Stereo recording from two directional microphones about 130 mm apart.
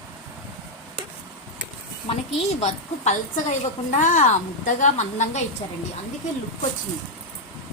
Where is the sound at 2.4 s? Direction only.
60° left (ahead or behind).